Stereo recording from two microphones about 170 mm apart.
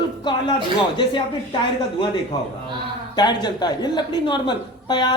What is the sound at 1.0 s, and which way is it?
Speech, 25° left (ahead or behind).